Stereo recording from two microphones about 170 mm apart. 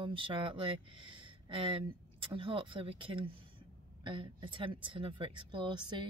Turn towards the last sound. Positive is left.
turn(degrees=-25)  # may be behind; listen again after turning